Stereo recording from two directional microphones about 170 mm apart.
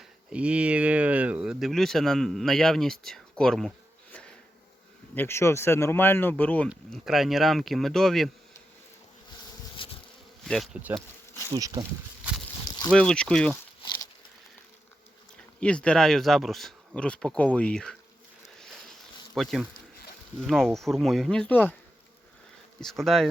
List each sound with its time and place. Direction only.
0.3 s speech: 5° right (ahead or behind)
5.1 s speech: 15° left (ahead or behind)
9.7 s bee: 30° left (ahead or behind)
10.4 s speech: centre (ahead or behind)
11.5 s speech: 20° right (ahead or behind)
12.9 s speech: 5° left (ahead or behind)
13.8 s a sound: 30° left (ahead or behind)
15.6 s speech: 5° left (ahead or behind)
19.4 s speech: centre (ahead or behind)
22.8 s speech: centre (ahead or behind)